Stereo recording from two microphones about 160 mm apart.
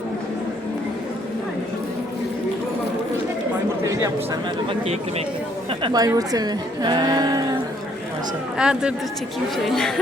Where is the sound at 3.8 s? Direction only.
20° right (ahead or behind).